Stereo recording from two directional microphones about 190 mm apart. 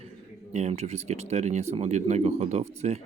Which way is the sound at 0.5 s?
35° right (ahead or behind).